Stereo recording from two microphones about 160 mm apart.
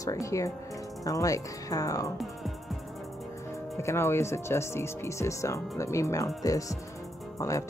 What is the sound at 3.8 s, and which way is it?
Speech, 15° left (ahead or behind).